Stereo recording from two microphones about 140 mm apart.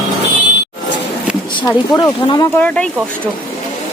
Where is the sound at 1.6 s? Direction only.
25° left (ahead or behind).